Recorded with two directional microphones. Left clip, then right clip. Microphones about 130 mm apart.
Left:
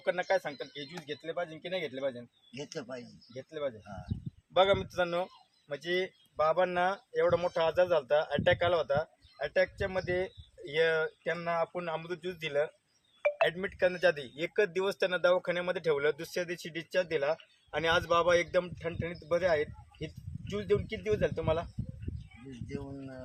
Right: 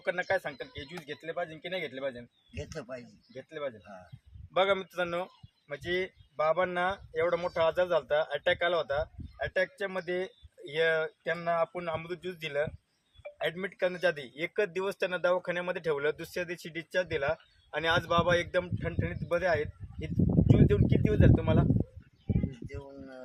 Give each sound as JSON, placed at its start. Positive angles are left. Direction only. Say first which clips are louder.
{"t": 0.0, "sound": "speech", "louder": "even", "side_deg": 10}
{"t": 2.6, "sound": "speech", "louder": "even", "side_deg": -20}
{"t": 3.3, "sound": "speech", "louder": "left 1 dB", "side_deg": 10}